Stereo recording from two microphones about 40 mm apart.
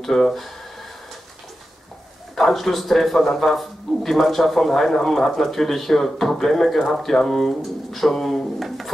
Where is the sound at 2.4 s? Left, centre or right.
Centre.